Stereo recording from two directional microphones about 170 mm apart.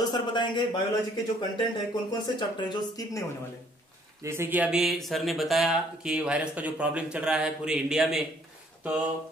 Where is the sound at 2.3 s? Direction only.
25° left (ahead or behind).